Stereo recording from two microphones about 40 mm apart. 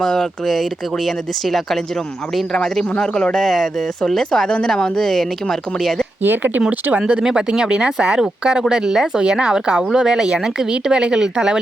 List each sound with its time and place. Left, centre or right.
0.0 s speech: centre
0.4 s speech: centre
2.6 s speech: centre
6.2 s speech: right
7.1 s speech: right